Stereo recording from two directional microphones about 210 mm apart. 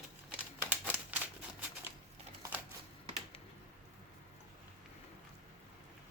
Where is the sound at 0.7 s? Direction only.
10° right (ahead or behind).